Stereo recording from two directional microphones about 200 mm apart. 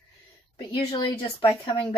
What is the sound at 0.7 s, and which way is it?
Speech, 25° left (ahead or behind).